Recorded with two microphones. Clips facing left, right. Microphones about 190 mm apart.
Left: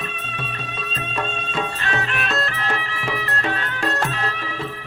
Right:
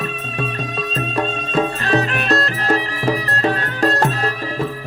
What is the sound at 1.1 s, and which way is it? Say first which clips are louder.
Music: right 6 dB; 35° right (ahead or behind).